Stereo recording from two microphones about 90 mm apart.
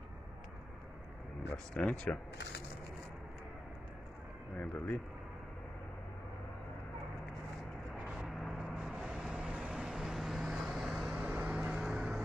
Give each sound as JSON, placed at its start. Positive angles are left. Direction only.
{"t": 1.7, "sound": "speech", "side_deg": 5}
{"t": 4.6, "sound": "speech", "side_deg": 15}
{"t": 8.1, "sound": "vehicle", "side_deg": 0}